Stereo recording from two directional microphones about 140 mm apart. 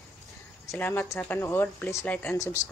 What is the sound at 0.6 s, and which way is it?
Speech, 15° left (ahead or behind).